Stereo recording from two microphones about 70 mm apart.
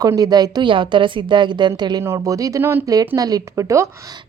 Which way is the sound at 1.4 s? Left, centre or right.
Right.